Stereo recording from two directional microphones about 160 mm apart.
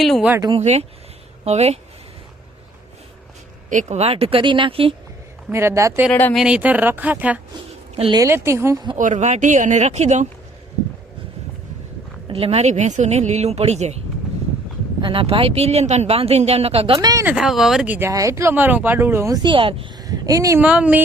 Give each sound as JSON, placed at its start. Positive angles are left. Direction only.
{"t": 0.0, "sound": "speech", "side_deg": 0}
{"t": 0.6, "sound": "speech", "side_deg": -45}
{"t": 3.7, "sound": "speech", "side_deg": -50}
{"t": 5.5, "sound": "speech", "side_deg": -15}
{"t": 6.1, "sound": "speech", "side_deg": 10}
{"t": 6.3, "sound": "speech", "side_deg": -5}
{"t": 7.9, "sound": "speech", "side_deg": -35}
{"t": 8.2, "sound": "speech", "side_deg": -15}
{"t": 9.0, "sound": "speech", "side_deg": -50}
{"t": 12.3, "sound": "speech", "side_deg": -40}
{"t": 15.0, "sound": "speech", "side_deg": -35}
{"t": 17.2, "sound": "speech", "side_deg": -5}
{"t": 20.6, "sound": "speech", "side_deg": -10}